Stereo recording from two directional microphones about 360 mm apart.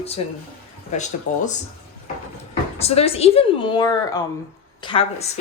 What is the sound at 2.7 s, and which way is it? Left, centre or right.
A woman's voice, centre.